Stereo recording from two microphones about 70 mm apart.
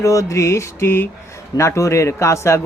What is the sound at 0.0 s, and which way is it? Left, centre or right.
A man's voice, left.